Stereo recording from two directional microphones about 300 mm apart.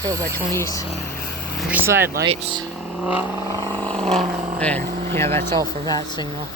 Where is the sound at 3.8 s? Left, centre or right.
Centre.